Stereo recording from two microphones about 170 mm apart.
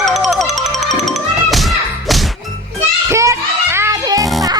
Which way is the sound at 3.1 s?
15° right (ahead or behind).